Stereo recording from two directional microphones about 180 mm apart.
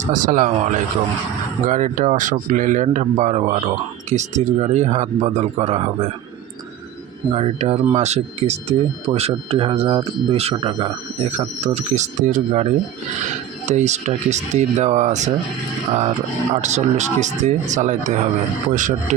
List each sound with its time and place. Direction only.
0.0 s speech: 45° right (ahead or behind)
7.3 s speech: 35° right (ahead or behind)
13.7 s speech: 40° right (ahead or behind)
16.6 s speech: 40° right (ahead or behind)